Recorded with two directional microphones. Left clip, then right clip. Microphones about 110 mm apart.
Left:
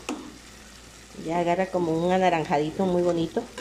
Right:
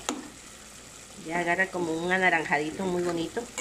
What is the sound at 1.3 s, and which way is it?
Speech, 15° left (ahead or behind).